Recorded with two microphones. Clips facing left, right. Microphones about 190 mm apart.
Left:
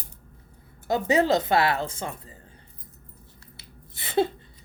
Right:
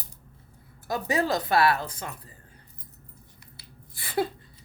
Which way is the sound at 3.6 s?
20° left (ahead or behind).